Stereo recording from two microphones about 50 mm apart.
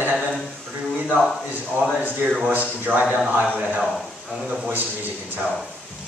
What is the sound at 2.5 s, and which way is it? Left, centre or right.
Speech, right.